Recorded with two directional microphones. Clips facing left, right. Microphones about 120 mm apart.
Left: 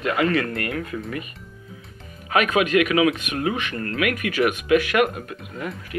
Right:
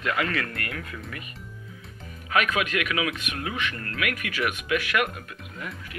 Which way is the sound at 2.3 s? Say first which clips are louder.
Left 6 dB; 25° left (ahead or behind).